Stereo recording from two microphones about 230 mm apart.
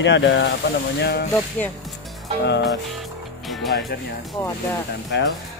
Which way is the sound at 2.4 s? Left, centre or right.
Left.